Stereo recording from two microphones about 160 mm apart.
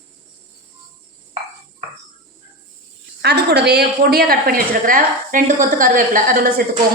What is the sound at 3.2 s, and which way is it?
A woman's voice, 90° right.